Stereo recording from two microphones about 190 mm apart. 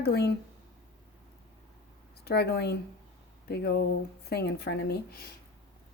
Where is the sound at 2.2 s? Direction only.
55° left (ahead or behind).